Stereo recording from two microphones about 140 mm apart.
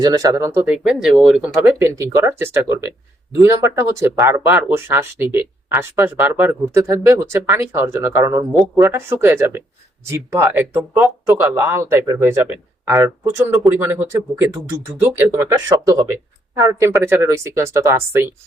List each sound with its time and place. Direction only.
0.0 s speech: 25° right (ahead or behind)
0.6 s speech: 5° right (ahead or behind)
1.8 s speech: 20° right (ahead or behind)